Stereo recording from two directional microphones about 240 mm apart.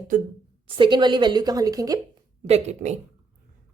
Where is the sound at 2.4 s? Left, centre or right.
Right.